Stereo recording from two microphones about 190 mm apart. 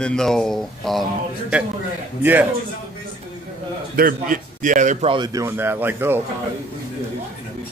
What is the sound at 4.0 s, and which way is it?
A man's voice, 50° right (ahead or behind).